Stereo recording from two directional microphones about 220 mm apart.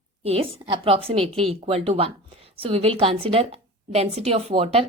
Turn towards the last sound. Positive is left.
turn(degrees=-25)  # may be behind; listen again after turning